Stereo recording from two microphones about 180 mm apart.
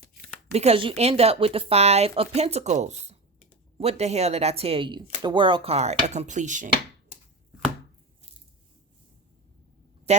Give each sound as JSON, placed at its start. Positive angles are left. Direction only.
{"t": 0.5, "sound": "speech", "side_deg": -35}
{"t": 10.1, "sound": "speech", "side_deg": -40}